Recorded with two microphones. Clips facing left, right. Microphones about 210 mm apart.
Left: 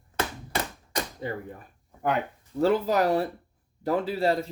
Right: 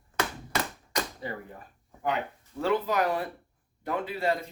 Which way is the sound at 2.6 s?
40° left (ahead or behind).